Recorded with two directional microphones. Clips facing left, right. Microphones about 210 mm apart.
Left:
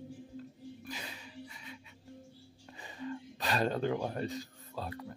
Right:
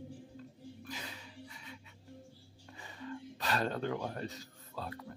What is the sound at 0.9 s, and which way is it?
Music, 15° left (ahead or behind).